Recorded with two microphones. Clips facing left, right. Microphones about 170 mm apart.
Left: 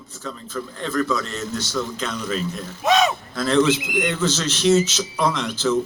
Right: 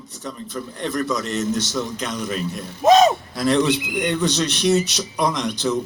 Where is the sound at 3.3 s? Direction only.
15° right (ahead or behind).